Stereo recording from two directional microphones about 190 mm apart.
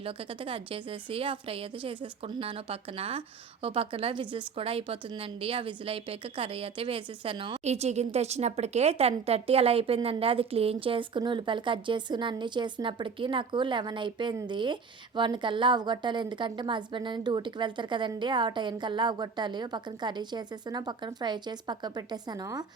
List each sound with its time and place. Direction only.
0.0 s a woman's voice: 30° right (ahead or behind)